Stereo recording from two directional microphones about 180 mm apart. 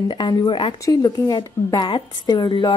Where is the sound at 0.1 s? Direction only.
25° left (ahead or behind).